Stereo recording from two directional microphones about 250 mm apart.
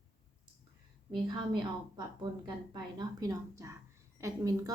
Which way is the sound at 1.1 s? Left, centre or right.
Centre.